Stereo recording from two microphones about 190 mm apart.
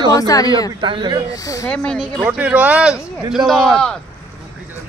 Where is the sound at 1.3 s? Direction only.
20° left (ahead or behind).